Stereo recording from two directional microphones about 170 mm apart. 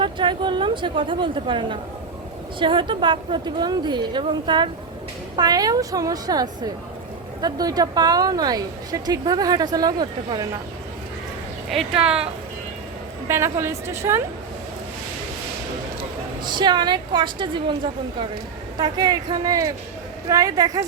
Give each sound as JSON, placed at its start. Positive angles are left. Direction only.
{"t": 0.0, "sound": "a woman's voice", "side_deg": -30}
{"t": 13.2, "sound": "a woman's voice", "side_deg": -15}
{"t": 16.4, "sound": "a woman's voice", "side_deg": -25}
{"t": 18.8, "sound": "a woman's voice", "side_deg": -25}